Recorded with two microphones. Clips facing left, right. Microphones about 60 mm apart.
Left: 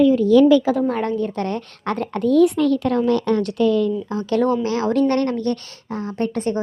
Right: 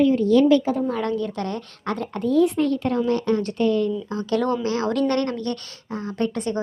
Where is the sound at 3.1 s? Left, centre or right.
Left.